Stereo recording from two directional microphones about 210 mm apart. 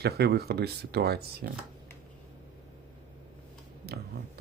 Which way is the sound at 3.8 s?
50° right (ahead or behind).